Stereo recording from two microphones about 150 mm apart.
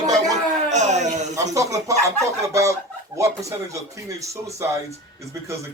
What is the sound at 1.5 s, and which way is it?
Speech, 20° right (ahead or behind).